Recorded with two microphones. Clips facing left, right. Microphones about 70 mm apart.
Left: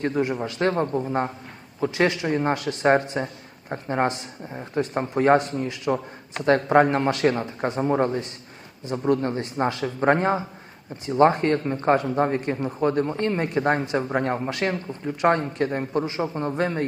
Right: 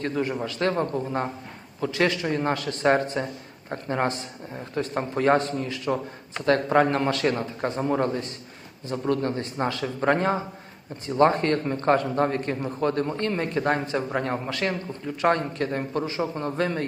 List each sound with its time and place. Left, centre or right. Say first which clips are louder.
0.0 s a man's voice: left 3 dB; centre